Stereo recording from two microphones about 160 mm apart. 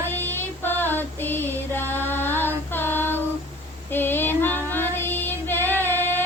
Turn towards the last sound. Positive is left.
turn(degrees=15)  # may be behind; listen again after turning